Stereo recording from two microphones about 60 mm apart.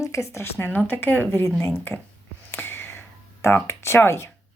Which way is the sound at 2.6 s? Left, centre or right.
Left.